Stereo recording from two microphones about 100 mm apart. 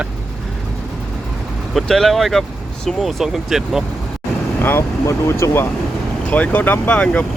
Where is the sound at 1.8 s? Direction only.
5° left (ahead or behind).